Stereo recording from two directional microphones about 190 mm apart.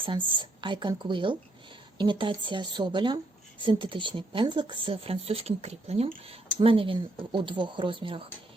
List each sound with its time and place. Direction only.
0.0 s speech: 25° right (ahead or behind)